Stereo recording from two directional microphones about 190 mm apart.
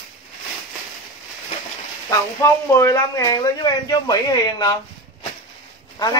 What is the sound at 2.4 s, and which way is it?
Speech, 15° left (ahead or behind).